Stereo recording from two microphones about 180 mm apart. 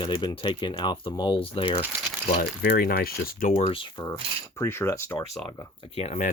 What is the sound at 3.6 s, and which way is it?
Speech, 30° left (ahead or behind).